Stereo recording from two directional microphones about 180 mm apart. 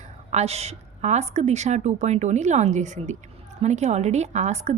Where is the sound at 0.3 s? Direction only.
35° right (ahead or behind).